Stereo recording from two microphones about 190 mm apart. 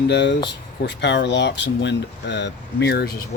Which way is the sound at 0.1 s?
65° left (ahead or behind).